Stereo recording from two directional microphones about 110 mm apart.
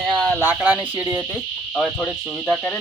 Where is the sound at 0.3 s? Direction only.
15° right (ahead or behind).